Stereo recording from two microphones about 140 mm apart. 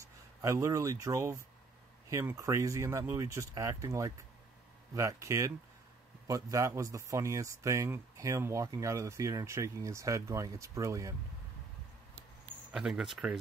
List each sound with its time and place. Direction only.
0.4 s speech: 20° right (ahead or behind)
12.7 s speech: 5° right (ahead or behind)